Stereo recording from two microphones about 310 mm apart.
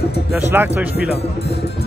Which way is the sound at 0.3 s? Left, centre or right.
Centre.